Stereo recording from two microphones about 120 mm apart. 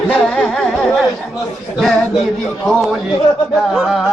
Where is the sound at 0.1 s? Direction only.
5° left (ahead or behind).